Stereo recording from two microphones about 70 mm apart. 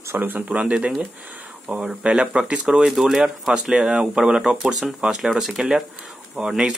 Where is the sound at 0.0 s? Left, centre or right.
Right.